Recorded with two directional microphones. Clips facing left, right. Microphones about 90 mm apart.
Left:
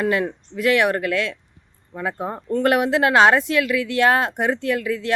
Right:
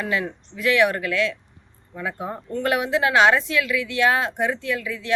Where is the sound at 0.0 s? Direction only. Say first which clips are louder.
Left 5 dB; 40° left (ahead or behind).